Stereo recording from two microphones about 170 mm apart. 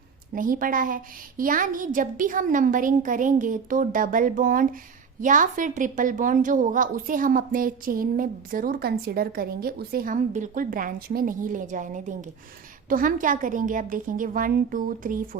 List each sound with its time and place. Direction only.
0.3 s a woman's voice: 55° right (ahead or behind)